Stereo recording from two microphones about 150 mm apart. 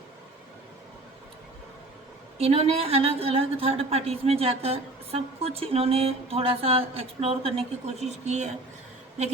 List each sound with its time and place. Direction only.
2.4 s a woman's voice: 40° right (ahead or behind)